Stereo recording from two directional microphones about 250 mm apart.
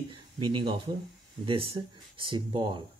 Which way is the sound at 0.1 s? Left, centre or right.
Centre.